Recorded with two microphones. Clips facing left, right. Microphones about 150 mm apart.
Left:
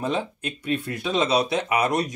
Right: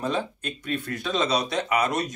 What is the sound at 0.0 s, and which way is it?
Speech, 15° left (ahead or behind).